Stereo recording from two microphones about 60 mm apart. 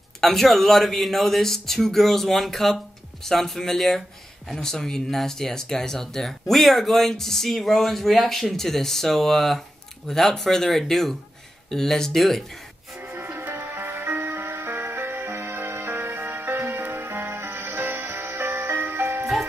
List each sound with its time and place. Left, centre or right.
0.2 s speech: centre
13.0 s music: right
14.1 s music: right
16.4 s music: right
16.7 s music: right